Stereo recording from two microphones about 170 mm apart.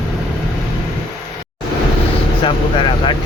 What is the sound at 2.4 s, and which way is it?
Vehicle, 30° left (ahead or behind).